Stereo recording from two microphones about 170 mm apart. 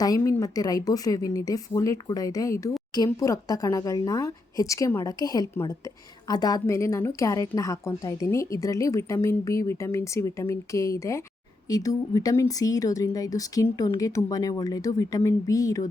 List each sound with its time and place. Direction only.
0.0 s a woman's voice: 20° left (ahead or behind)